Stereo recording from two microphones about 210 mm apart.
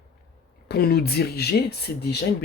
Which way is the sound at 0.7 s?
50° left (ahead or behind).